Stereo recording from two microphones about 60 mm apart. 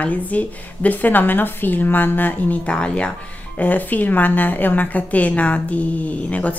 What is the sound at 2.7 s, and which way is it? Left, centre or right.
Speech, centre.